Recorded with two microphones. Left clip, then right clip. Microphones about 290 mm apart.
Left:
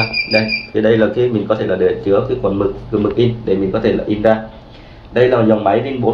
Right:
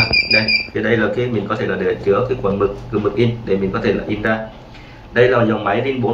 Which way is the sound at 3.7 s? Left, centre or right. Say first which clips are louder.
Left 3 dB; centre.